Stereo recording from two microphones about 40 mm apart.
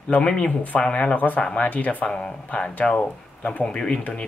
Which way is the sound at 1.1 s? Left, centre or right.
Left.